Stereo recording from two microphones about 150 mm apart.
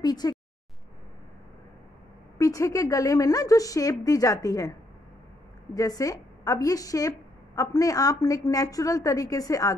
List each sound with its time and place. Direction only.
0.0 s a woman's voice: 25° left (ahead or behind)
2.3 s a woman's voice: 20° left (ahead or behind)
5.8 s a woman's voice: 25° left (ahead or behind)